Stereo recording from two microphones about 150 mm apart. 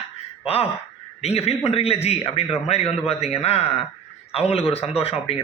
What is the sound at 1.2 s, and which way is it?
A man's voice, 45° left (ahead or behind).